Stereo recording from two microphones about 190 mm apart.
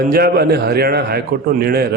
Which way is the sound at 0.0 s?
55° right (ahead or behind).